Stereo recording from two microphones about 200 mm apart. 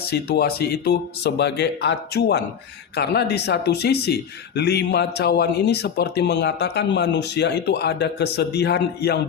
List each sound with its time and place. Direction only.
0.0 s speech: 50° left (ahead or behind)